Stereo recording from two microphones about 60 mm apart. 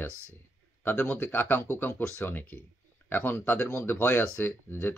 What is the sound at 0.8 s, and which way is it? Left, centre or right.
Speech, left.